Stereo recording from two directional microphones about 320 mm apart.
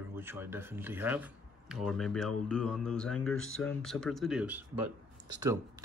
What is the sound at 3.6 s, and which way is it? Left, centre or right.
Speech, centre.